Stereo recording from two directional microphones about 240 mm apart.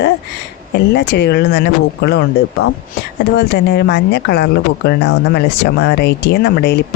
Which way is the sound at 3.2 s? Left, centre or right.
Left.